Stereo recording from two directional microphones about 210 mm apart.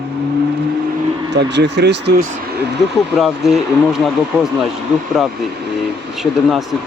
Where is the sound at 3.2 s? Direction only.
Centre (ahead or behind).